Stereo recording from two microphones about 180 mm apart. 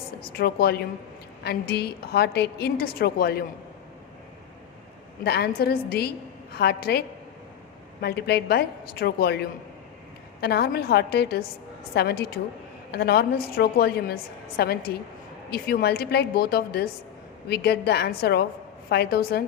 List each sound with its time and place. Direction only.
0.3 s a woman's voice: 55° left (ahead or behind)
5.2 s a woman's voice: 65° left (ahead or behind)
8.0 s a woman's voice: 65° left (ahead or behind)